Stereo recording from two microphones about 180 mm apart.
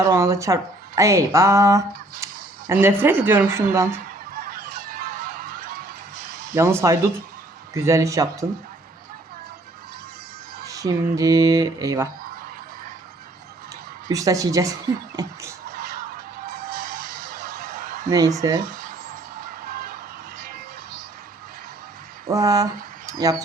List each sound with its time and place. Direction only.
0.0 s speech: 20° right (ahead or behind)
2.8 s speech: 10° right (ahead or behind)
4.4 s honk: 50° right (ahead or behind)
6.2 s a sound: 50° right (ahead or behind)
6.5 s speech: 15° right (ahead or behind)
10.8 s speech: 20° right (ahead or behind)
14.1 s speech: 20° right (ahead or behind)
15.7 s music: 55° right (ahead or behind)
18.3 s speech: 20° right (ahead or behind)
18.6 s a sound: 50° right (ahead or behind)
19.4 s music: 55° right (ahead or behind)
22.3 s speech: 20° right (ahead or behind)